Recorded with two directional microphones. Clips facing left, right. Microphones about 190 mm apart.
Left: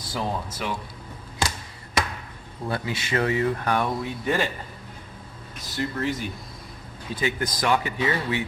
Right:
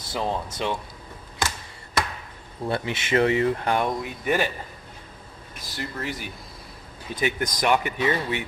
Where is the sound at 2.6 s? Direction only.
25° right (ahead or behind).